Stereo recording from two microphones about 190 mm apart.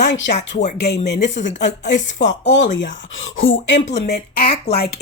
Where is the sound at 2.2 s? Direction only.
65° left (ahead or behind); by 3.8 s 80° left.